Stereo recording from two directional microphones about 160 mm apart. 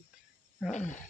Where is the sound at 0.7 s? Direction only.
50° left (ahead or behind).